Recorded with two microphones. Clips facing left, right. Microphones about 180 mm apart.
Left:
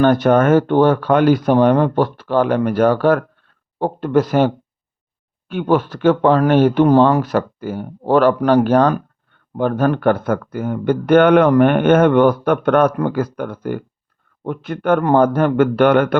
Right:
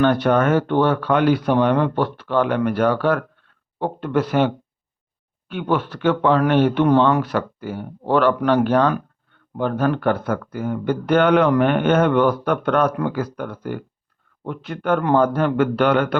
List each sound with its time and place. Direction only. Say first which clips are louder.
0.0 s speech: left 4 dB; 45° left (ahead or behind)
9.6 s speech: left 4 dB; 50° left (ahead or behind)